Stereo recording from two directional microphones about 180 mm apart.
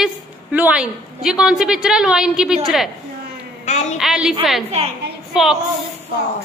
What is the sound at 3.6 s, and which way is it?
Speech, 40° left (ahead or behind).